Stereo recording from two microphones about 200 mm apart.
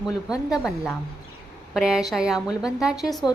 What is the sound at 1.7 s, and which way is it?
A woman's voice, centre (ahead or behind).